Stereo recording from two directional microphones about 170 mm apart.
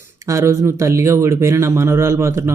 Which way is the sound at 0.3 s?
15° right (ahead or behind).